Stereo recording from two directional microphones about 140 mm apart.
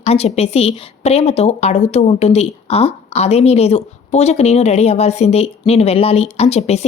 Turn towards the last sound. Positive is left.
turn(degrees=50)  # may be behind; listen again after turning